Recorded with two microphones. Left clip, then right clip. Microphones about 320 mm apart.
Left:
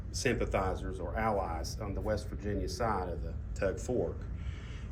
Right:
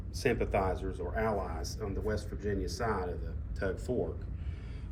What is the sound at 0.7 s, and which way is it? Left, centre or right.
Speech, centre.